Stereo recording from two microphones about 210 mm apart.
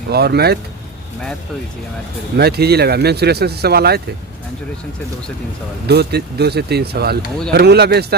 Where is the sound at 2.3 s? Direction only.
50° right (ahead or behind).